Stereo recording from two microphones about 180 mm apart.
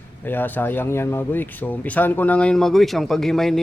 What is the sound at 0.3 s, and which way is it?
Speech, 10° left (ahead or behind).